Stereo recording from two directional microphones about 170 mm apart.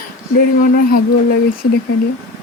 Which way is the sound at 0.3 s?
60° left (ahead or behind).